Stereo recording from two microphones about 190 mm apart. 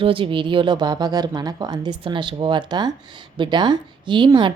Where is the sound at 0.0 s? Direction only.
25° right (ahead or behind).